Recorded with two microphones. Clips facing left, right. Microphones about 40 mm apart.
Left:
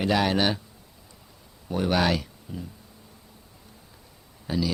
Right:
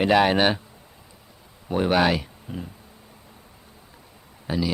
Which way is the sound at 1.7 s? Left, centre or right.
Right.